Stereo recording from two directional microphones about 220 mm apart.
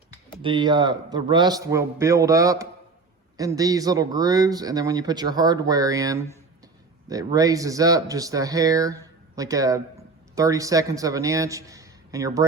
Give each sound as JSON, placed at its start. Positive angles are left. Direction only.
{"t": 0.4, "sound": "speech", "side_deg": -20}